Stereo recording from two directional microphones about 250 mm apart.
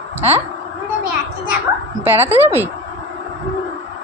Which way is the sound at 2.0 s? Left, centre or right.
Centre.